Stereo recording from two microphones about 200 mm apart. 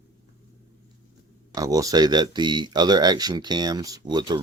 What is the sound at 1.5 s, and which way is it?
Speech, 15° right (ahead or behind).